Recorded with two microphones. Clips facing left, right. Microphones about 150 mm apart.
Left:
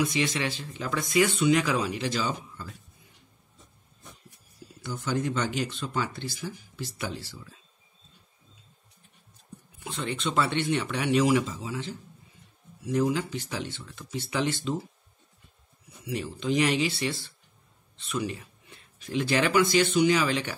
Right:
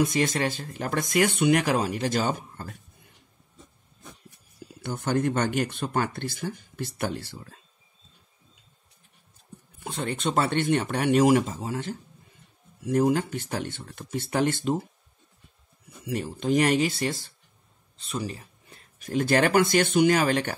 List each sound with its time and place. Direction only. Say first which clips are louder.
0.0 s speech: right 3 dB; 45° right (ahead or behind)
4.8 s speech: right 4 dB; 55° right (ahead or behind)
9.8 s speech: right 3 dB; 50° right (ahead or behind)
16.1 s speech: right 3 dB; 50° right (ahead or behind)